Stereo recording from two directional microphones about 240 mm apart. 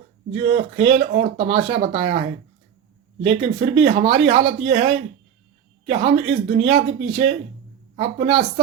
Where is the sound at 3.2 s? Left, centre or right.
Right.